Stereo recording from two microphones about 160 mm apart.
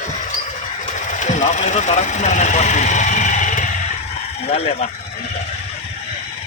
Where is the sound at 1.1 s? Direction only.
50° left (ahead or behind).